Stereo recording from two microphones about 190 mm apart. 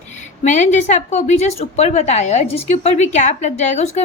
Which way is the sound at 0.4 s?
40° left (ahead or behind).